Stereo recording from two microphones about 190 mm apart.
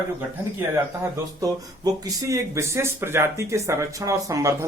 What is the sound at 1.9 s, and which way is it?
Speech, 15° right (ahead or behind).